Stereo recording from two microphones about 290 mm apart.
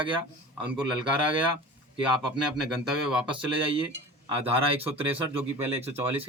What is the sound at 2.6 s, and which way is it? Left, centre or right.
Speech, centre.